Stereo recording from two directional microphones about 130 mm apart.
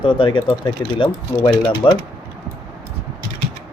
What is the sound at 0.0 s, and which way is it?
Speech, 40° left (ahead or behind).